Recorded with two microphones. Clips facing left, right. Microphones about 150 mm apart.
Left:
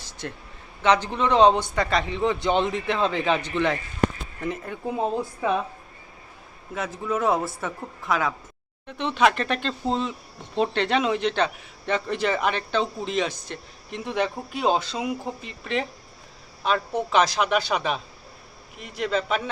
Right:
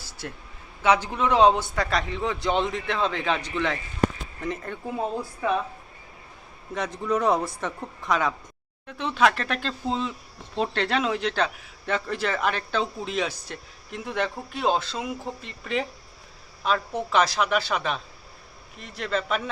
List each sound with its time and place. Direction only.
0.0 s a sound: 5° right (ahead or behind)
0.8 s speech: 10° right (ahead or behind)
4.9 s speech: 20° left (ahead or behind)
6.7 s speech: 5° left (ahead or behind)